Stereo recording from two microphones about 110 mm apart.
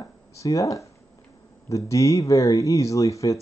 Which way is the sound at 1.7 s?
30° left (ahead or behind).